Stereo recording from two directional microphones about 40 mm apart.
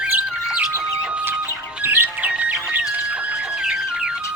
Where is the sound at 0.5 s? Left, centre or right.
Right.